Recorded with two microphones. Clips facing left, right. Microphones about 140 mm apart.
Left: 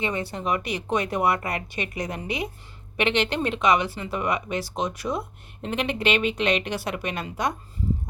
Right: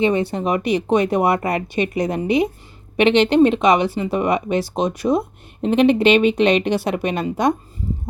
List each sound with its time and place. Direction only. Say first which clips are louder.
0.0 s speech: right 10 dB; 20° right (ahead or behind)